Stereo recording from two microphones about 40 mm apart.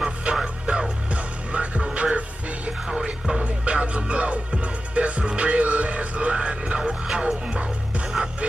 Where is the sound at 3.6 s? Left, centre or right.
Right.